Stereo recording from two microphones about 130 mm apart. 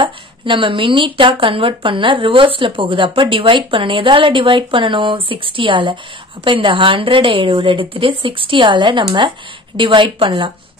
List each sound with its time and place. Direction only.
0.0 s speech: 40° right (ahead or behind)